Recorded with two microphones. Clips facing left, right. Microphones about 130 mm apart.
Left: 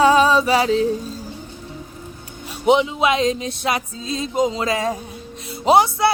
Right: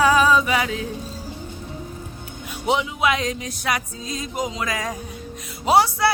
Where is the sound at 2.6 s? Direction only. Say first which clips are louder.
Left 5 dB; 20° left (ahead or behind).